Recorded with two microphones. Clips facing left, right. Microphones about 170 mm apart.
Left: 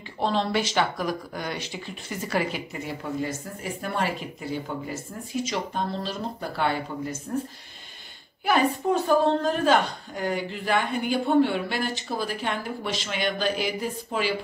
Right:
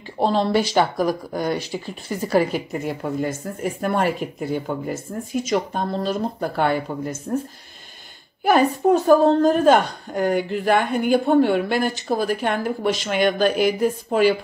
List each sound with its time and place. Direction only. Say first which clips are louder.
0.2 s speech: right 6 dB; 40° right (ahead or behind)
8.5 s speech: right 6 dB; 45° right (ahead or behind)